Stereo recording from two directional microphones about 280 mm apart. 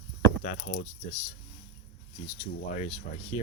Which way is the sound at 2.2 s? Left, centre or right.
Left.